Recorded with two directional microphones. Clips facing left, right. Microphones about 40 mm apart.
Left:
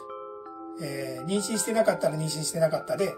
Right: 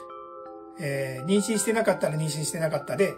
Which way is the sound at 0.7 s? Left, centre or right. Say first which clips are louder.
Right 4 dB; right.